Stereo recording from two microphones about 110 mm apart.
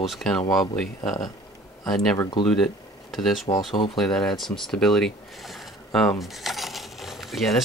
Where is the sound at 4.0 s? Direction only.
5° left (ahead or behind).